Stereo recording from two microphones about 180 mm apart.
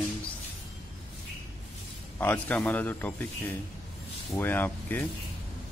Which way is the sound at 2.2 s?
10° left (ahead or behind).